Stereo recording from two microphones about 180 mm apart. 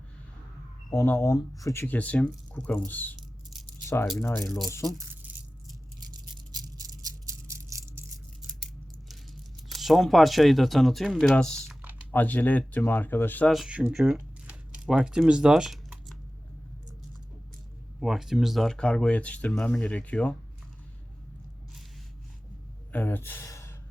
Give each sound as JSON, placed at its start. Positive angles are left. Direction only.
{"t": 0.9, "sound": "speech", "side_deg": 15}
{"t": 4.2, "sound": "speech", "side_deg": 15}
{"t": 4.4, "sound": "speech", "side_deg": 0}
{"t": 5.2, "sound": "a sound", "side_deg": -10}
{"t": 6.0, "sound": "a sound", "side_deg": -25}
{"t": 8.4, "sound": "a sound", "side_deg": 0}
{"t": 9.6, "sound": "speech", "side_deg": 0}
{"t": 18.0, "sound": "speech", "side_deg": 0}
{"t": 22.9, "sound": "speech", "side_deg": 10}